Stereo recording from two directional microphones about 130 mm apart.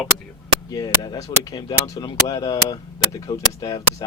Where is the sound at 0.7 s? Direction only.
30° left (ahead or behind).